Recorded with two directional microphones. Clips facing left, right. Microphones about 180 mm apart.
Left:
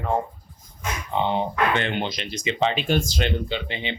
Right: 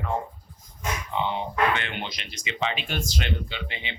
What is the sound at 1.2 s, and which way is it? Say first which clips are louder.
Speech: left 2 dB; 35° left (ahead or behind).